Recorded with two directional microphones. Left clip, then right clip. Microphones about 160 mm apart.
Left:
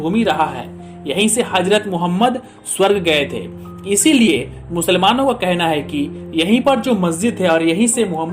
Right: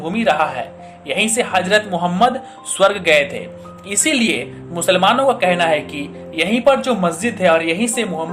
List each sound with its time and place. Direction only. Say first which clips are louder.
0.0 s a woman's voice: even; 35° left (ahead or behind)